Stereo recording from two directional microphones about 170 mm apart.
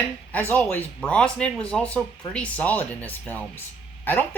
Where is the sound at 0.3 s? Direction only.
10° left (ahead or behind).